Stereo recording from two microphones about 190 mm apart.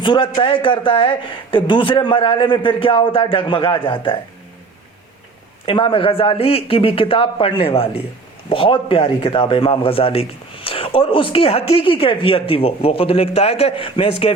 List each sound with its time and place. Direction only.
0.0 s a man's voice: 25° left (ahead or behind)
5.6 s a man's voice: 25° left (ahead or behind)